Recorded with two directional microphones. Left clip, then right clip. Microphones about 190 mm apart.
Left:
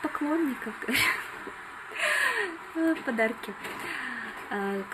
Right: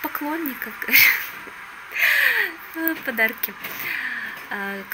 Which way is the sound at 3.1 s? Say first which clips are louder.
Right 6 dB; 5° left (ahead or behind).